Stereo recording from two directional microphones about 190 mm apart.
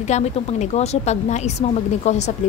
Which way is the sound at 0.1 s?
35° left (ahead or behind).